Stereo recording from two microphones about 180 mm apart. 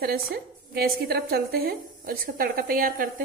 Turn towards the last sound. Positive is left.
turn(degrees=-55)  # may be behind; listen again after turning